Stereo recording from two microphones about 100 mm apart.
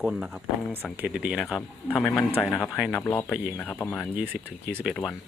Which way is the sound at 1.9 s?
15° left (ahead or behind).